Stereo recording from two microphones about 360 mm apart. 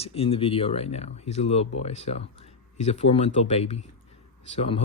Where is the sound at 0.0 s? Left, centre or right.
Centre.